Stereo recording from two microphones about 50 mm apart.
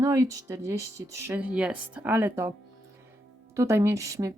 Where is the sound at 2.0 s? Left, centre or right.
Right.